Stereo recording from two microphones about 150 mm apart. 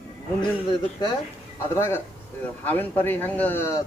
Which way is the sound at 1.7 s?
15° left (ahead or behind).